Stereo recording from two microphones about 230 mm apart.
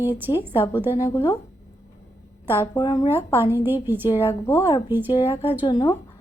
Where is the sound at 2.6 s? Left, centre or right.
Centre.